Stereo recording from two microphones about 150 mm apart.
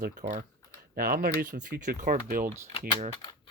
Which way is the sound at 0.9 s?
80° right.